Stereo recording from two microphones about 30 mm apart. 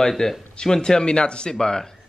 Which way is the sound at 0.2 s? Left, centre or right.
Centre.